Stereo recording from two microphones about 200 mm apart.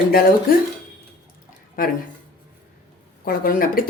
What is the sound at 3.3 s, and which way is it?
Speech, 45° left (ahead or behind).